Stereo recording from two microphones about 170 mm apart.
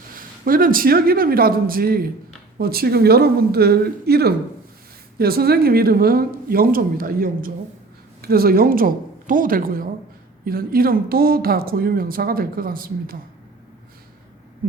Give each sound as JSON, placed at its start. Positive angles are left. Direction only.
{"t": 0.1, "sound": "a woman's voice", "side_deg": -55}
{"t": 14.6, "sound": "speech", "side_deg": -55}